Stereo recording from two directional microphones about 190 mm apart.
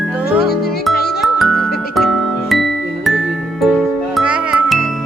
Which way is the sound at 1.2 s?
Centre (ahead or behind).